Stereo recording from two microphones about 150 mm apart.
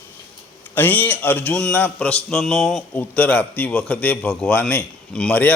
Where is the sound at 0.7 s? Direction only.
10° left (ahead or behind).